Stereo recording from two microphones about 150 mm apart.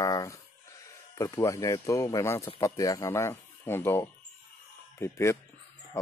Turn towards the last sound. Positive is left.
turn(degrees=20)  # may be behind; listen again after turning